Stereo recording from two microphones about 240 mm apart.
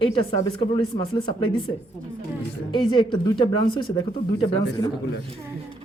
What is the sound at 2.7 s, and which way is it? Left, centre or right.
Speech, centre.